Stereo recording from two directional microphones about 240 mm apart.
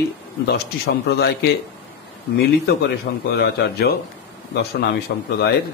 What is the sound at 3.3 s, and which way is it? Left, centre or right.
Speech, left.